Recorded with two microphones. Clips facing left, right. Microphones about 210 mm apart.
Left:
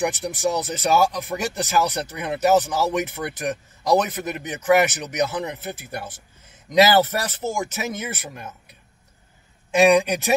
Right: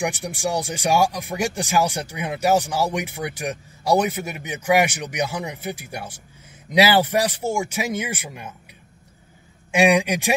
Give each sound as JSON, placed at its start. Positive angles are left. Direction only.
{"t": 0.0, "sound": "speech", "side_deg": -10}
{"t": 9.7, "sound": "speech", "side_deg": -15}